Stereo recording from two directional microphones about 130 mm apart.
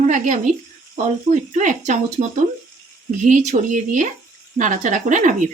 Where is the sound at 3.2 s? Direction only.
70° right (ahead or behind).